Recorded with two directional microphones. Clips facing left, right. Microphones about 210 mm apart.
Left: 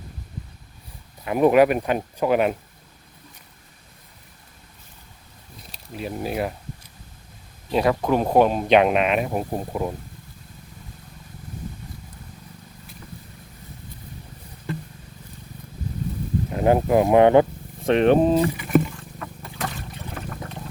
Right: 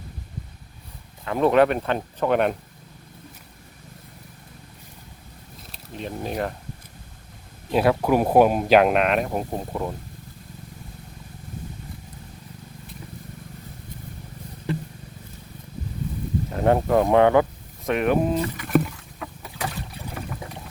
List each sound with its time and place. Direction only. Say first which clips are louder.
1.2 s speech: left 2 dB; 15° left (ahead or behind)
5.7 s speech: left 2 dB; 5° left (ahead or behind)
7.7 s speech: right 1 dB; 5° right (ahead or behind)
16.5 s speech: left 1 dB; 5° left (ahead or behind); by 18.4 s 30° left (ahead or behind)
18.5 s rowboat: left 2 dB; centre (ahead or behind)